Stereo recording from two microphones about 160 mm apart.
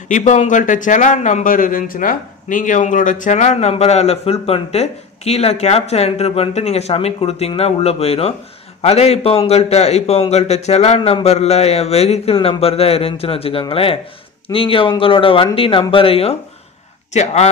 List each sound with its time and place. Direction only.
0.1 s speech: 45° left (ahead or behind)